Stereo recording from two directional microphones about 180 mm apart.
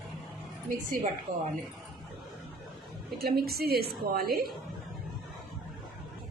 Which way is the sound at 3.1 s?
60° right (ahead or behind).